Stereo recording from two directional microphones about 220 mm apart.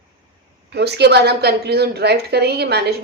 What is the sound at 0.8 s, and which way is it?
A woman's voice, 50° right (ahead or behind).